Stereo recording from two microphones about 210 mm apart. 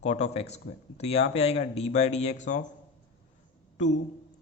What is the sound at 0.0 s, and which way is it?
Speech, 30° left (ahead or behind).